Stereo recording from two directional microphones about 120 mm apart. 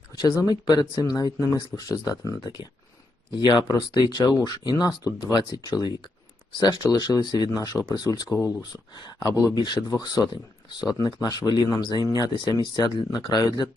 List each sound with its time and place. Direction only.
0.2 s speech: 35° left (ahead or behind)